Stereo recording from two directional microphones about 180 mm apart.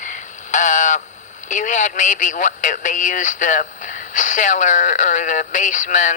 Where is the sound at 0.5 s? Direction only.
45° left (ahead or behind).